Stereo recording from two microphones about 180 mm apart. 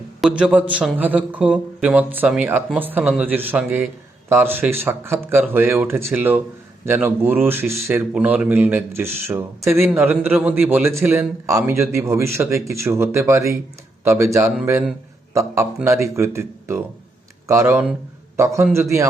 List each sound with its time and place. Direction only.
0.2 s a man's voice: 5° right (ahead or behind)